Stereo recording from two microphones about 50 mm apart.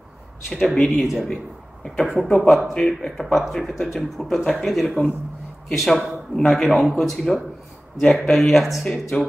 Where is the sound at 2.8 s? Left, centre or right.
Centre.